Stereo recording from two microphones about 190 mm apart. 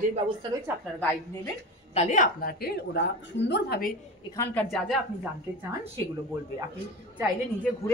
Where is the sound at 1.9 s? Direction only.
40° left (ahead or behind).